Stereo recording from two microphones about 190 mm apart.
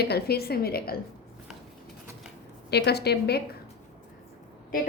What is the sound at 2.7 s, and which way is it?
Speech, 60° left (ahead or behind).